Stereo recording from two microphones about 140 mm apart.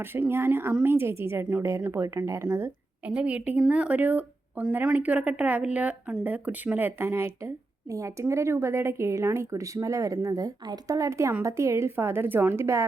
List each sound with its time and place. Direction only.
0.0 s a woman's voice: 15° right (ahead or behind)